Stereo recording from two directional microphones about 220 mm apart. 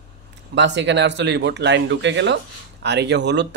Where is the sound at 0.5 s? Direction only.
55° right (ahead or behind).